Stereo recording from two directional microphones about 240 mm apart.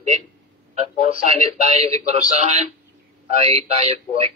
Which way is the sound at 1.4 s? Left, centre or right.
Right.